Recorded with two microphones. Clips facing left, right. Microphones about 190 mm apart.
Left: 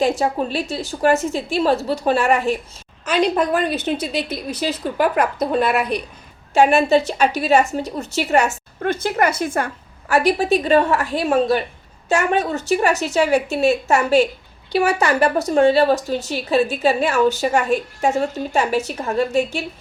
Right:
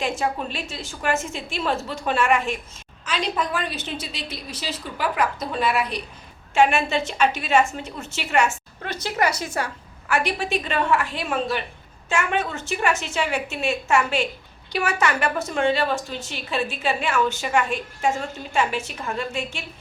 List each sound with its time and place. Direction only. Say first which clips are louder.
0.0 s a woman's voice: left 7 dB; 35° left (ahead or behind)
3.0 s a woman's voice: left 8 dB; 60° left (ahead or behind)
6.5 s a woman's voice: left 6 dB; 40° left (ahead or behind); by 9.6 s 55° left (ahead or behind)
10.1 s a woman's voice: left 7 dB; 40° left (ahead or behind)